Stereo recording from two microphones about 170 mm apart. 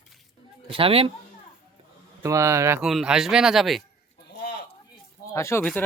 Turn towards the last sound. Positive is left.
turn(degrees=10)  # may be behind; listen again after turning